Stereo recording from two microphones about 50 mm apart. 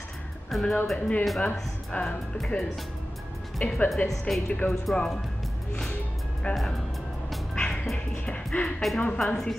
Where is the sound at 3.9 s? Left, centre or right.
Centre.